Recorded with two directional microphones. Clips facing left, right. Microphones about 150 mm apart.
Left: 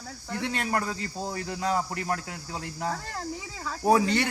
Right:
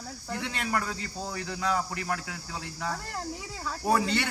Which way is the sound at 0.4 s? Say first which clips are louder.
Left 3 dB; 40° left (ahead or behind).